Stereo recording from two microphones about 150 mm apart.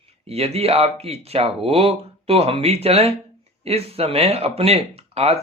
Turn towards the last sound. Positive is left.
turn(degrees=-45)  # may be behind; listen again after turning